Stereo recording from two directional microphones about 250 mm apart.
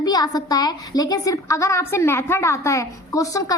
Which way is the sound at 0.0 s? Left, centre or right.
Centre.